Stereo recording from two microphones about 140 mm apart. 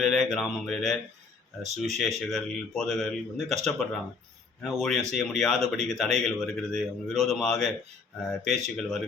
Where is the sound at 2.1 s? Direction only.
5° left (ahead or behind).